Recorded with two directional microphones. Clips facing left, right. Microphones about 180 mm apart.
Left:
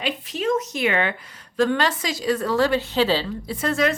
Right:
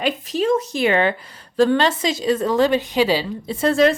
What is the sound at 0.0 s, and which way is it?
A woman's voice, 35° right (ahead or behind).